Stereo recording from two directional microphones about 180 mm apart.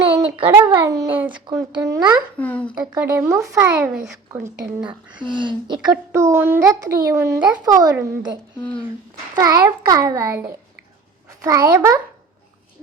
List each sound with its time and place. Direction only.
0.0 s a sound: 30° right (ahead or behind)
0.8 s a child's voice: 15° right (ahead or behind)
1.3 s a child's voice: 25° right (ahead or behind)
2.4 s speech: 5° left (ahead or behind)
2.9 s a child's voice: 15° right (ahead or behind)
5.1 s a child's voice: 25° right (ahead or behind)
5.9 s a child's voice: 15° right (ahead or behind)